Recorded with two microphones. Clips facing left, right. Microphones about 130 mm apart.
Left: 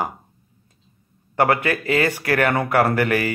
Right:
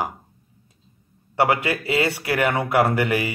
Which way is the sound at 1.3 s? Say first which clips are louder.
Left 1 dB; 15° right (ahead or behind).